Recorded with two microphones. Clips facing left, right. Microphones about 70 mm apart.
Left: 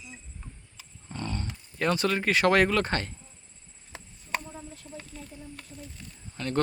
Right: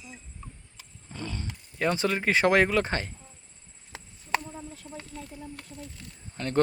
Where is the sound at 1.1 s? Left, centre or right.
Left.